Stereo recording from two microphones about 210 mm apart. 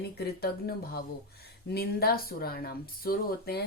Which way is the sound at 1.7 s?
50° left (ahead or behind).